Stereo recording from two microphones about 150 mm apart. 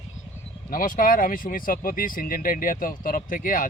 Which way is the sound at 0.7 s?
65° left (ahead or behind).